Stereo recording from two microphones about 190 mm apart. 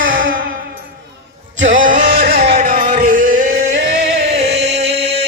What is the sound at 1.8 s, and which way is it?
Music, 45° right (ahead or behind).